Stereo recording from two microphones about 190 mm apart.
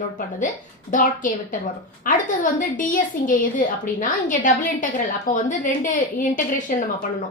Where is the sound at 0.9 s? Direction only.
45° left (ahead or behind).